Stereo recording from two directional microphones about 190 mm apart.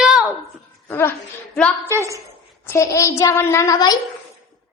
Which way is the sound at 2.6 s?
15° left (ahead or behind).